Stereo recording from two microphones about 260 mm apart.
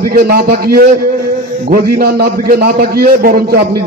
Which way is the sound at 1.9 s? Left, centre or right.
Right.